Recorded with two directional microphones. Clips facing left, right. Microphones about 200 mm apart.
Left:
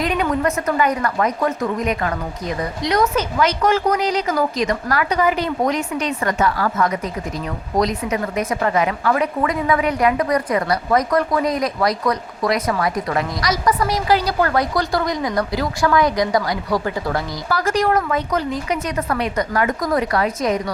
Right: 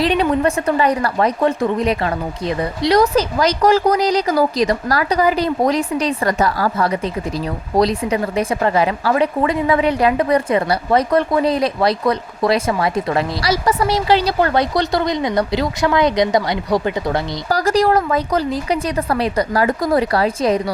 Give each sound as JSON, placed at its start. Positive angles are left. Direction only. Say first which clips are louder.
{"t": 0.0, "sound": "a woman's voice", "louder": "right 4 dB", "side_deg": -30}
{"t": 17.5, "sound": "a woman's voice", "louder": "right 3 dB", "side_deg": -35}